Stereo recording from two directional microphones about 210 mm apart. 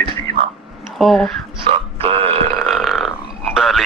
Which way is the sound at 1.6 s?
25° right (ahead or behind).